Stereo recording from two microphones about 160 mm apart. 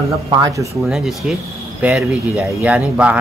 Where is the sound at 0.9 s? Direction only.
5° right (ahead or behind).